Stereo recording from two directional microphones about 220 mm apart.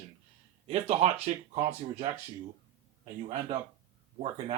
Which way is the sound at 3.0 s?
25° right (ahead or behind).